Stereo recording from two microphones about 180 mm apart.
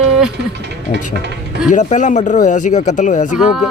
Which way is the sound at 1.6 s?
45° left (ahead or behind).